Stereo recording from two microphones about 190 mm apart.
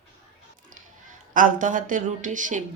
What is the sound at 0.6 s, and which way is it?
Speech, 45° right (ahead or behind).